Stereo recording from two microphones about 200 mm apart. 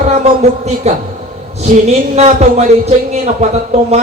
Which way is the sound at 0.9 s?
30° right (ahead or behind).